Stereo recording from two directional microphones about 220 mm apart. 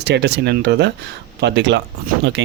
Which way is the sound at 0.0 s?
50° right (ahead or behind).